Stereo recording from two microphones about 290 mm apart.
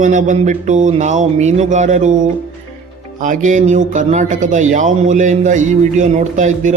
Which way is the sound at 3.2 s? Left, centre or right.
Right.